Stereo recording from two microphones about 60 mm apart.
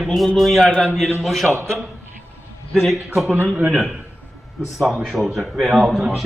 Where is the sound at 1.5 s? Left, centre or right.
Right.